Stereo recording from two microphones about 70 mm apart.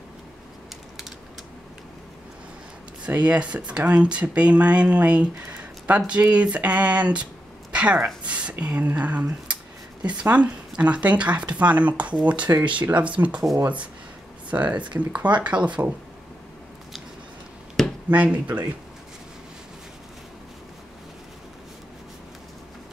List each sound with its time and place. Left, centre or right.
3.1 s speech: centre
7.7 s a sound: centre
8.2 s speech: centre
12.5 s speech: right
12.9 s speech: centre
14.5 s speech: right
17.8 s a sound: centre
18.1 s speech: right